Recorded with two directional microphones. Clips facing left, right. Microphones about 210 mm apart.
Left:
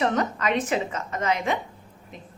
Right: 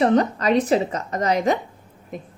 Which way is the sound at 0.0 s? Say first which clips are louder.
Right 6 dB; 35° right (ahead or behind).